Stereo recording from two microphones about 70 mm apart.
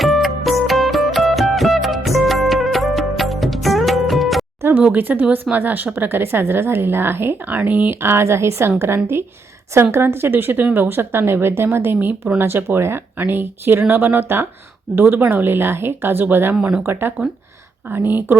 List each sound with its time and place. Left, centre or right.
0.0 s music: centre
4.9 s a woman's voice: right
9.7 s a woman's voice: right
16.6 s speech: centre
16.8 s a woman's voice: right